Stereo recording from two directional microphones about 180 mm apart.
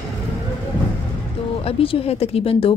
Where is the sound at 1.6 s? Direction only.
30° left (ahead or behind).